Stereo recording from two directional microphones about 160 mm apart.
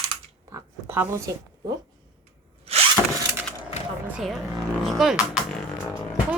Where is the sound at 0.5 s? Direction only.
15° right (ahead or behind).